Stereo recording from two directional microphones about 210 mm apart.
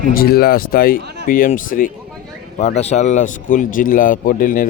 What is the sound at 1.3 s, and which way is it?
Speech, 40° left (ahead or behind).